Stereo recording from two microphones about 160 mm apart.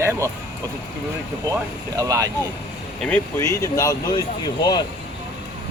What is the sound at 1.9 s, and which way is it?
Speech, 20° right (ahead or behind).